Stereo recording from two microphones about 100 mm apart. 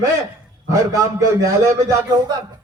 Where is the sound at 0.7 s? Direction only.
35° right (ahead or behind).